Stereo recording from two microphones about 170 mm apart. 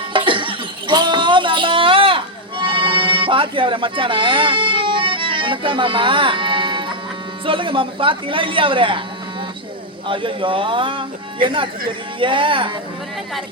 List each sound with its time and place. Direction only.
0.1 s a sound: 30° right (ahead or behind)
7.4 s speech: 30° right (ahead or behind)
10.1 s speech: 30° right (ahead or behind)